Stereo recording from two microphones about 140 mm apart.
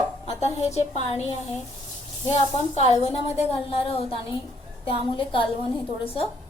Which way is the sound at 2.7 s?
45° left (ahead or behind).